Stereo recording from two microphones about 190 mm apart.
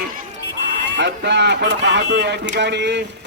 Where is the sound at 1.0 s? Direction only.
65° right (ahead or behind).